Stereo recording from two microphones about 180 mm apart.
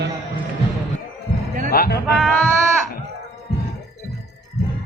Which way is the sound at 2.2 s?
5° left (ahead or behind).